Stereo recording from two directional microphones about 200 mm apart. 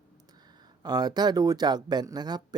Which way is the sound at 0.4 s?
20° right (ahead or behind).